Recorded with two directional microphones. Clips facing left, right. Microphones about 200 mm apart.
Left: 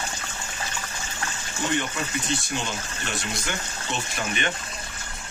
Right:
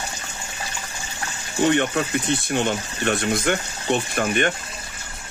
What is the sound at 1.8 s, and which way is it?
Speech, 60° right (ahead or behind).